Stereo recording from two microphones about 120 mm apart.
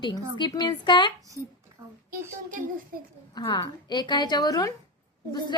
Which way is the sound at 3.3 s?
35° left (ahead or behind).